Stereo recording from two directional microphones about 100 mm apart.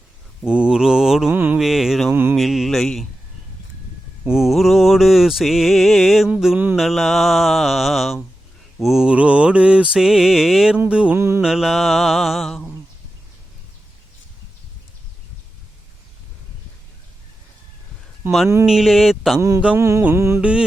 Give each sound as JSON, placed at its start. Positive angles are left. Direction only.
{"t": 0.4, "sound": "mantra", "side_deg": -10}
{"t": 1.3, "sound": "mantra", "side_deg": -15}
{"t": 1.5, "sound": "mantra", "side_deg": -5}
{"t": 2.3, "sound": "a sound", "side_deg": 0}
{"t": 4.3, "sound": "mantra", "side_deg": -5}
{"t": 10.8, "sound": "music", "side_deg": -10}
{"t": 11.2, "sound": "mantra", "side_deg": -25}
{"t": 11.4, "sound": "mantra", "side_deg": -5}
{"t": 18.6, "sound": "speech", "side_deg": -5}
{"t": 19.4, "sound": "mantra", "side_deg": -30}
{"t": 19.8, "sound": "a sound", "side_deg": -25}
{"t": 20.4, "sound": "mantra", "side_deg": -10}